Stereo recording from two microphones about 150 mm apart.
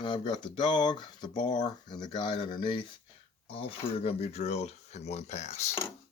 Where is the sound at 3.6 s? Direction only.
45° left (ahead or behind).